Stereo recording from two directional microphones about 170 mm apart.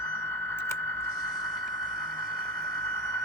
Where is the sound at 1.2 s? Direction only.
25° left (ahead or behind).